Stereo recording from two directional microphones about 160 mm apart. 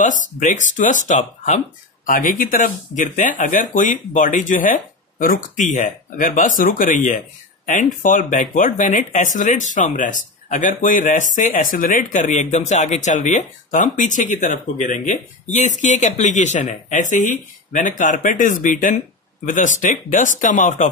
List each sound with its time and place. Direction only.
0.0 s speech: 55° left (ahead or behind)